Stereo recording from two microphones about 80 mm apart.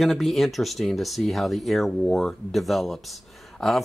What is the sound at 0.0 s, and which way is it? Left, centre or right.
Speech, centre.